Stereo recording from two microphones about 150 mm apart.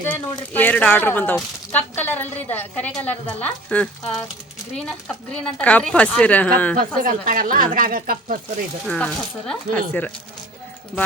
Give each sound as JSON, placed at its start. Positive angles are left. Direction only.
{"t": 0.5, "sound": "speech", "side_deg": 10}
{"t": 6.7, "sound": "speech", "side_deg": -65}
{"t": 8.9, "sound": "speech", "side_deg": 5}